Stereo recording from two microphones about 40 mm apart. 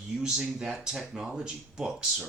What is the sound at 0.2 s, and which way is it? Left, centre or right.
Speech, centre.